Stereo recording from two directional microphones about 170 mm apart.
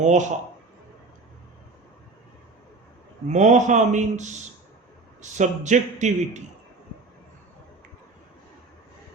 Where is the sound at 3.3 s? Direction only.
45° right (ahead or behind).